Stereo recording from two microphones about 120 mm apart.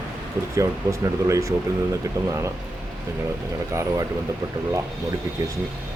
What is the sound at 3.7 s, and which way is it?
Speech, 25° right (ahead or behind).